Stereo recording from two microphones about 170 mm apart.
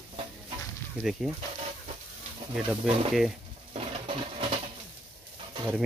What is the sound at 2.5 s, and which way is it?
Speech, 5° right (ahead or behind).